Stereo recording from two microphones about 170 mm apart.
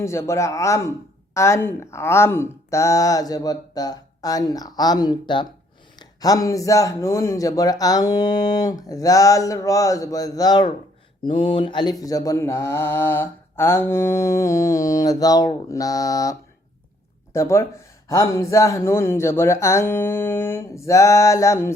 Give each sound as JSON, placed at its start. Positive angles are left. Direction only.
{"t": 0.0, "sound": "speech", "side_deg": 15}
{"t": 17.3, "sound": "speech", "side_deg": 15}